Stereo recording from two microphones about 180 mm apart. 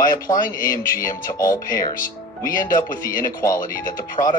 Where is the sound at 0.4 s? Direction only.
50° left (ahead or behind).